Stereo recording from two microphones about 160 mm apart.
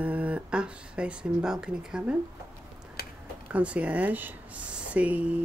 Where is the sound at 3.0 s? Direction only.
75° left (ahead or behind).